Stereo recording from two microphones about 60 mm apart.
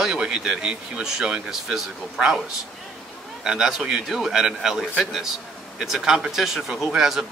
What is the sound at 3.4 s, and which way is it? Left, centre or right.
A man's voice, centre.